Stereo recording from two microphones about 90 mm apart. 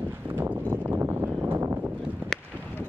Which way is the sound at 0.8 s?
25° right (ahead or behind).